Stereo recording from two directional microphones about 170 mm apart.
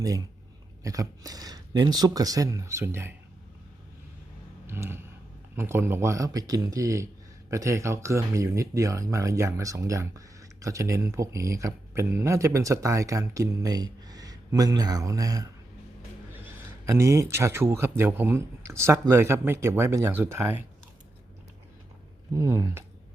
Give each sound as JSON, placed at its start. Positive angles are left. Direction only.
{"t": 0.0, "sound": "speech", "side_deg": -20}
{"t": 4.6, "sound": "a sound", "side_deg": -15}
{"t": 5.5, "sound": "speech", "side_deg": -15}
{"t": 22.4, "sound": "speech", "side_deg": -15}